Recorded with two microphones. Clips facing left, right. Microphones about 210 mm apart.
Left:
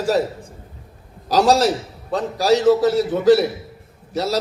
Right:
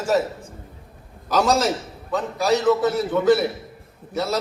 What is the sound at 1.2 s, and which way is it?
A man's voice, 35° left (ahead or behind).